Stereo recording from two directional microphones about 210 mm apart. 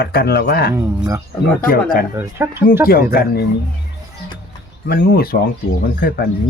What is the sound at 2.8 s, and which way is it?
Speech, 45° left (ahead or behind).